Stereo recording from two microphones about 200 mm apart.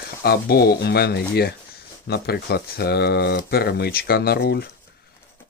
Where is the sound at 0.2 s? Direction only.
50° left (ahead or behind).